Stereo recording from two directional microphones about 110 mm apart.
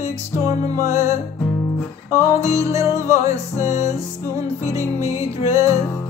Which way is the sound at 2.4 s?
25° right (ahead or behind).